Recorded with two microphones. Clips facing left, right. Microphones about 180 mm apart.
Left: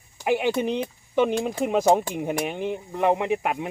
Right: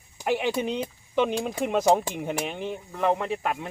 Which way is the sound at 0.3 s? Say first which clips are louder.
Left 3 dB; 5° left (ahead or behind).